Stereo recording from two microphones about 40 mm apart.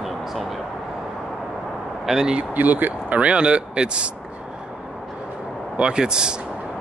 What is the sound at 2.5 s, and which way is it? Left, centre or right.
Speech, right.